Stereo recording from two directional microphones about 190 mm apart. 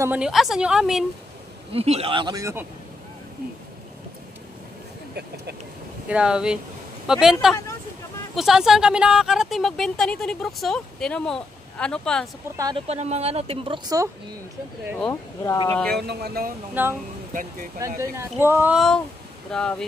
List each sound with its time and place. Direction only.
0.0 s a woman's voice: 5° right (ahead or behind)
1.7 s speech: 30° right (ahead or behind)
6.0 s a woman's voice: 5° right (ahead or behind)
12.5 s speech: 20° right (ahead or behind)
12.8 s speech: 35° right (ahead or behind)
15.0 s speech: 20° left (ahead or behind)
16.0 s speech: 60° right (ahead or behind)
16.8 s speech: 10° right (ahead or behind)
17.3 s speech: 45° right (ahead or behind)
17.7 s a woman's voice: 15° right (ahead or behind); by 19.8 s 5° left (ahead or behind)